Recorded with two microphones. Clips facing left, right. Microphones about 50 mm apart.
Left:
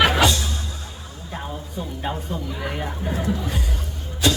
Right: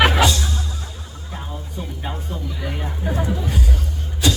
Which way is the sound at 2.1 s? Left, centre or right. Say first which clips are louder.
Left 4 dB; centre.